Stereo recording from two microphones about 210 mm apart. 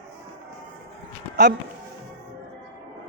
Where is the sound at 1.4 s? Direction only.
50° right (ahead or behind).